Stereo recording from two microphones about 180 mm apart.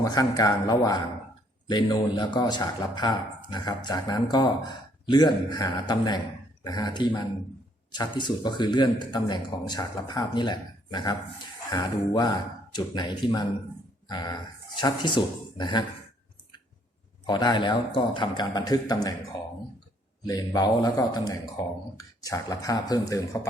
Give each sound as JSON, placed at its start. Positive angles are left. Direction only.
{"t": 0.0, "sound": "a man's voice", "side_deg": 20}
{"t": 17.2, "sound": "a man's voice", "side_deg": 25}
{"t": 20.2, "sound": "a man's voice", "side_deg": 20}